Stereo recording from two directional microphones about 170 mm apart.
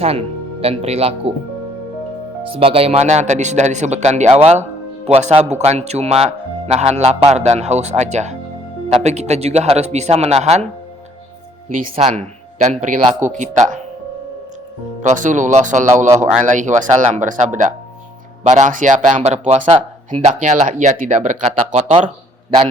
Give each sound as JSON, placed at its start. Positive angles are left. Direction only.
{"t": 0.0, "sound": "speech", "side_deg": -35}
{"t": 2.5, "sound": "speech", "side_deg": -35}
{"t": 11.8, "sound": "speech", "side_deg": -45}
{"t": 15.0, "sound": "speech", "side_deg": -50}